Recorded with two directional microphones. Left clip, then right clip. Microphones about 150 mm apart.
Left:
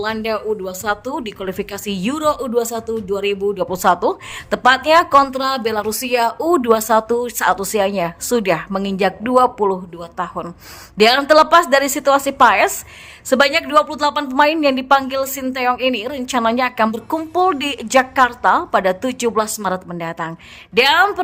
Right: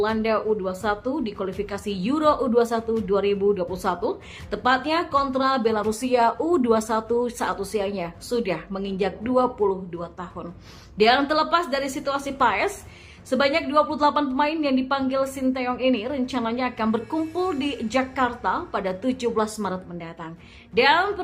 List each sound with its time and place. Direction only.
0.0 s a woman's voice: 45° left (ahead or behind)